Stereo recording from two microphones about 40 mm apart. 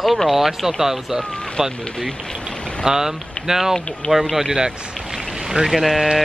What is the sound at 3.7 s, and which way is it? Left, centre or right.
Speech, centre.